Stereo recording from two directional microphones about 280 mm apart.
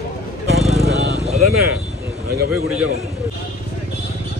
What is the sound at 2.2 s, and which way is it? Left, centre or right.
Speech, right.